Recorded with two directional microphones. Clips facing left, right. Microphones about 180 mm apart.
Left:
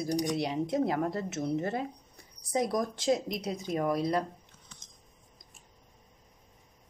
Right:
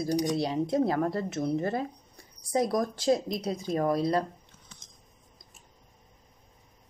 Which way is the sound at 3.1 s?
30° right (ahead or behind).